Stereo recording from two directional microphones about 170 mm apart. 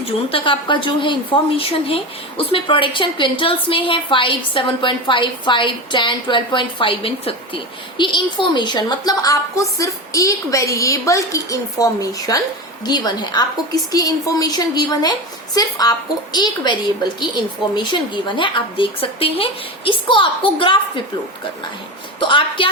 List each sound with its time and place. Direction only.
0.0 s a woman's voice: 30° left (ahead or behind)
22.2 s a woman's voice: 30° left (ahead or behind)